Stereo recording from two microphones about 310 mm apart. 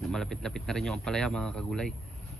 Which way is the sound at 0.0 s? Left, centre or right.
Centre.